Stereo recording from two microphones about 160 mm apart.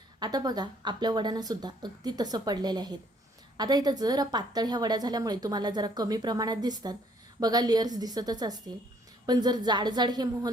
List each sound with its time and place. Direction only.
0.2 s a woman's voice: 25° right (ahead or behind)